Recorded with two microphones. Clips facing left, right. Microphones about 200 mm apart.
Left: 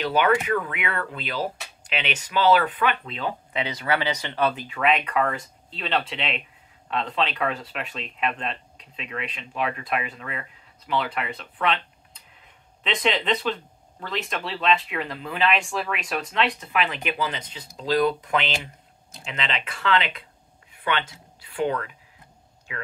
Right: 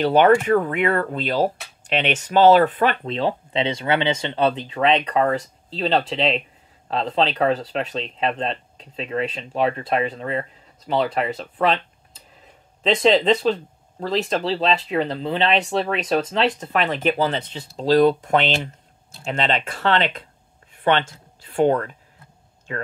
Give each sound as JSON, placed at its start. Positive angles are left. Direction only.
{"t": 0.0, "sound": "speech", "side_deg": -45}